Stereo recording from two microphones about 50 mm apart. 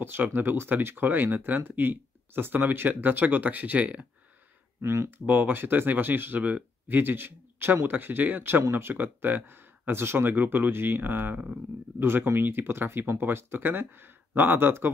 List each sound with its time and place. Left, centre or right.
0.0 s speech: right
4.8 s speech: right
5.2 s speech: right